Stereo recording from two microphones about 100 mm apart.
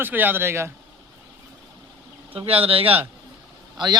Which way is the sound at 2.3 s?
70° right (ahead or behind).